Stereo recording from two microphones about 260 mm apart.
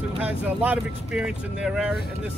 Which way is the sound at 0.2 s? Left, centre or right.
Centre.